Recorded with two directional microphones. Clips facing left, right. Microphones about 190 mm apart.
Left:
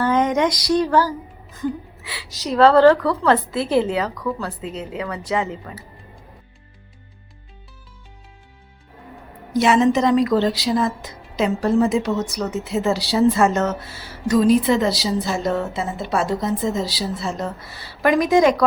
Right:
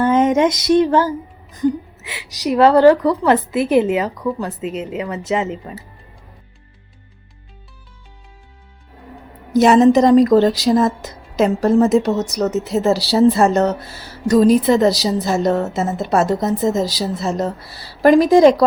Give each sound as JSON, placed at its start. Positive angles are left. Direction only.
{"t": 0.0, "sound": "music", "side_deg": -25}
{"t": 1.5, "sound": "a woman's voice", "side_deg": -20}
{"t": 9.5, "sound": "a woman's voice", "side_deg": -40}